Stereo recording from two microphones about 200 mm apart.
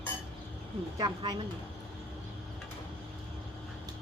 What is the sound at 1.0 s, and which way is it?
Speech, 20° right (ahead or behind).